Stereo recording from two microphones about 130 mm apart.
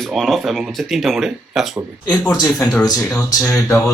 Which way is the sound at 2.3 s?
30° left (ahead or behind).